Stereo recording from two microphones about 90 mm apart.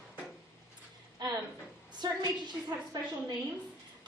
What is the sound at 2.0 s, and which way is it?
Speech, 50° right (ahead or behind).